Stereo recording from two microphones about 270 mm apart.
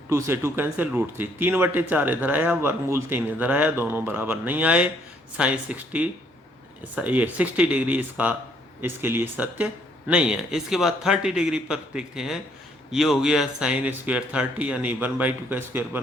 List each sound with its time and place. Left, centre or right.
0.1 s speech: centre